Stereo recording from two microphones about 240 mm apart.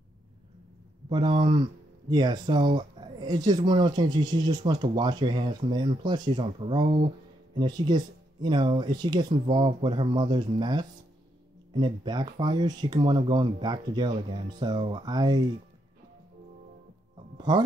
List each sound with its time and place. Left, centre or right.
1.0 s speech: centre
17.4 s speech: centre